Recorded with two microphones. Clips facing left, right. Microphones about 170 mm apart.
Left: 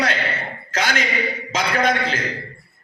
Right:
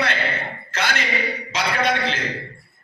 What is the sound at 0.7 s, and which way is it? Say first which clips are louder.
A man's voice: left 2 dB; 45° left (ahead or behind).